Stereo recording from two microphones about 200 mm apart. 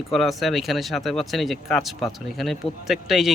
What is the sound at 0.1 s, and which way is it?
Speech, centre (ahead or behind).